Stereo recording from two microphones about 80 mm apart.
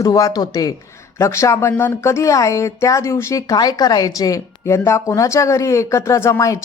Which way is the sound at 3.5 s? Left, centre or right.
Left.